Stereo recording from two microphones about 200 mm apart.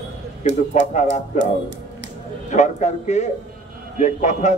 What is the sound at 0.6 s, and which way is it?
A man's voice, 35° left (ahead or behind).